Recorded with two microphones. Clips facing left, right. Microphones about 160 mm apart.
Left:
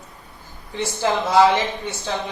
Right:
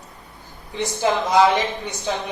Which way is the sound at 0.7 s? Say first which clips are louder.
Right 1 dB; 20° right (ahead or behind).